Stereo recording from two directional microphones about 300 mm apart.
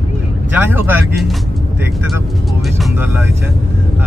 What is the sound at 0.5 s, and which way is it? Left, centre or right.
Speech, centre.